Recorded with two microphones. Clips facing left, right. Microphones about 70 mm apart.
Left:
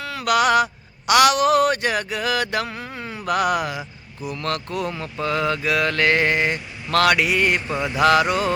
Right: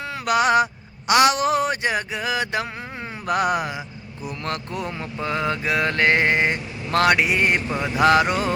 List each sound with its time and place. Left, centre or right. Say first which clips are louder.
0.0 s speech: left 1 dB; right
4.4 s mantra: left 3 dB; right